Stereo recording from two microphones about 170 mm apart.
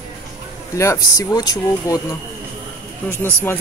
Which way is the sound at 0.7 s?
20° left (ahead or behind).